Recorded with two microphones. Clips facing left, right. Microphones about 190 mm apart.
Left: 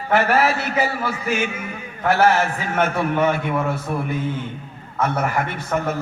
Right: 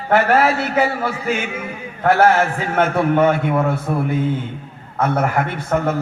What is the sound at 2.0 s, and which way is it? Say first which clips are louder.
Speech: right 3 dB; 55° right (ahead or behind).